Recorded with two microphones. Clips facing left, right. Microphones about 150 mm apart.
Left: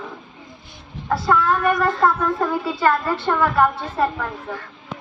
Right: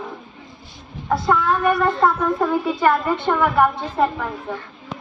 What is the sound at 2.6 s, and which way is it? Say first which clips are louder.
A woman's voice: right 1 dB; 20° right (ahead or behind).